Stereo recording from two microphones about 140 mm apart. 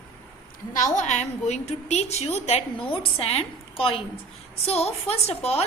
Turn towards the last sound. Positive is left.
turn(degrees=45)  # may be behind; listen again after turning